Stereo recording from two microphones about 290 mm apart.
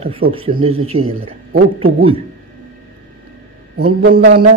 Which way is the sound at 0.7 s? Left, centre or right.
Right.